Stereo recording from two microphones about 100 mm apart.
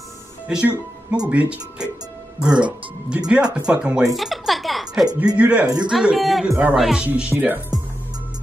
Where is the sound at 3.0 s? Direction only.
10° right (ahead or behind).